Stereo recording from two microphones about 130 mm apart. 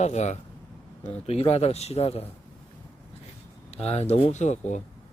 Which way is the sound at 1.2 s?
50° left (ahead or behind).